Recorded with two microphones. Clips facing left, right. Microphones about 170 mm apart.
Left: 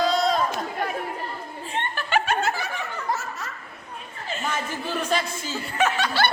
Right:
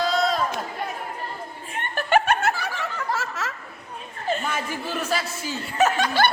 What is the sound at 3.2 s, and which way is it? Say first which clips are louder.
Laughter: right 4 dB; 90° right.